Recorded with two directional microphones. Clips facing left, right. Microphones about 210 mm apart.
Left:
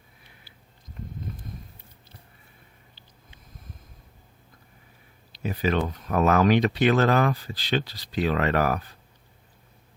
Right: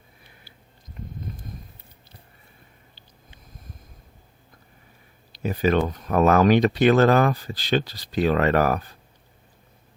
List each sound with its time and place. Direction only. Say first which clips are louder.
5.3 s speech: right 4 dB; 45° right (ahead or behind)